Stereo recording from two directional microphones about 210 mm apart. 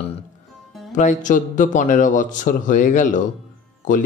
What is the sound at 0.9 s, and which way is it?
A man's voice, 35° left (ahead or behind).